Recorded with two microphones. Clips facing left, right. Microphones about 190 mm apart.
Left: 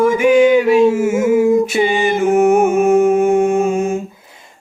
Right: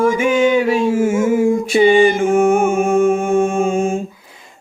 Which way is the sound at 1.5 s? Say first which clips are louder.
Left 2 dB; 20° left (ahead or behind).